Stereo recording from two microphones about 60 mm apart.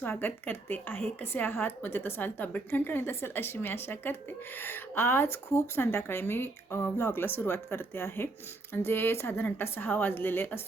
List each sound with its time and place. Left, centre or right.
0.0 s a woman's voice: left